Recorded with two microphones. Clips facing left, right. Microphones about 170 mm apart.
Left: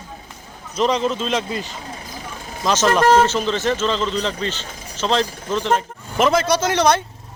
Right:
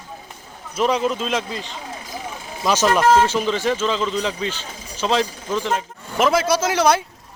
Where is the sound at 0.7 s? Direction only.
5° right (ahead or behind).